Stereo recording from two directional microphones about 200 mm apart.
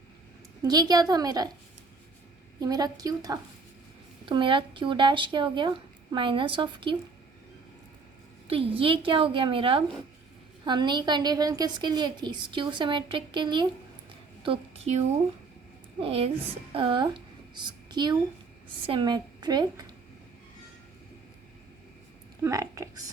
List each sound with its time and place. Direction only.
0.6 s a woman's voice: 20° right (ahead or behind)
2.6 s a woman's voice: 20° right (ahead or behind)
8.4 s a woman's voice: 25° right (ahead or behind)
22.4 s speech: 15° right (ahead or behind)